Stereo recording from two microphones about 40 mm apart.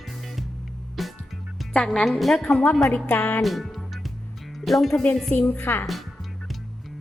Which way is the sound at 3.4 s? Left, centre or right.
Centre.